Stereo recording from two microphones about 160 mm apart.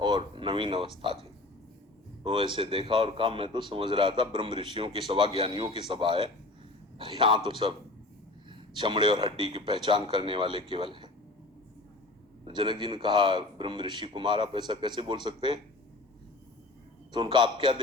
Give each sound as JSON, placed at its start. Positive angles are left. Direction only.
{"t": 0.0, "sound": "a sound", "side_deg": -30}
{"t": 2.2, "sound": "a man's voice", "side_deg": -30}
{"t": 12.5, "sound": "a man's voice", "side_deg": -30}
{"t": 17.1, "sound": "a man's voice", "side_deg": -30}